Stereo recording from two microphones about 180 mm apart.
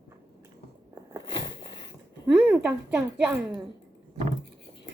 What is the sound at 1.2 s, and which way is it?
Biting, 25° left (ahead or behind).